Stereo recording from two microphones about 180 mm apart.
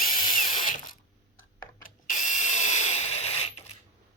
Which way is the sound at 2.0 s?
45° left (ahead or behind).